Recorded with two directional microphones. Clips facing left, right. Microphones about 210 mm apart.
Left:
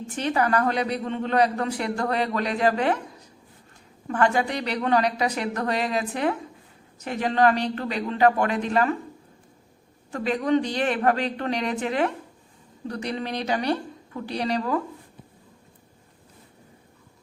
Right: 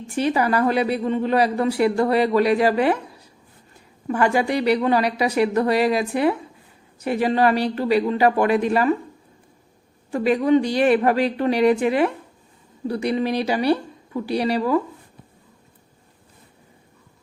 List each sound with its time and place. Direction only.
0.1 s speech: 10° right (ahead or behind)
10.1 s speech: 10° right (ahead or behind)